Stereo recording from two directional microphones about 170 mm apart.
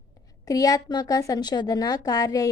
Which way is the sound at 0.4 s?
20° left (ahead or behind).